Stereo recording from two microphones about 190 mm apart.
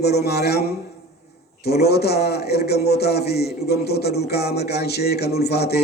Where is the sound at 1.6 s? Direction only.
55° left (ahead or behind).